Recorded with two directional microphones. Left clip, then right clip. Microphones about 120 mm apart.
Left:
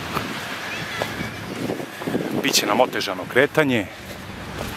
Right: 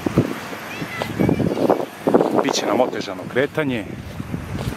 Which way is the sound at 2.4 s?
40° left (ahead or behind).